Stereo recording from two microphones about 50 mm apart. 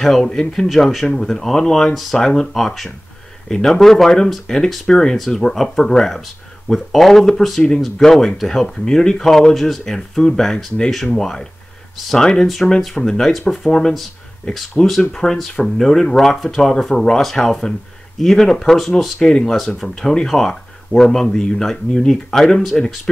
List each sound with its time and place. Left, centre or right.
0.0 s speech: centre
2.5 s speech: centre
3.4 s speech: centre
19.1 s speech: centre
19.4 s speech: centre
21.3 s speech: centre
21.5 s speech: centre